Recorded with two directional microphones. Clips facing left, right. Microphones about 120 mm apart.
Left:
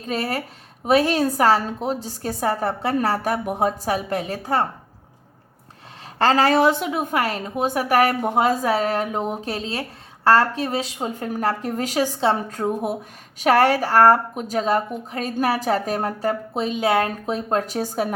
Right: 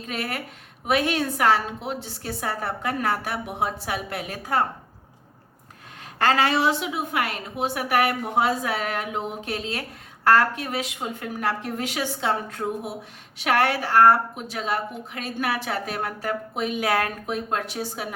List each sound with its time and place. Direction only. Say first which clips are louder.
0.1 s a woman's voice: left 6 dB; 35° left (ahead or behind)
6.1 s a woman's voice: left 4 dB; 35° left (ahead or behind)